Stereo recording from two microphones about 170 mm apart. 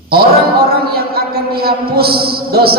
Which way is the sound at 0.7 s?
65° right (ahead or behind).